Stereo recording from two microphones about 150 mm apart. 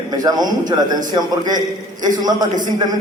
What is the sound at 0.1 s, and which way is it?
A man's voice, 25° right (ahead or behind).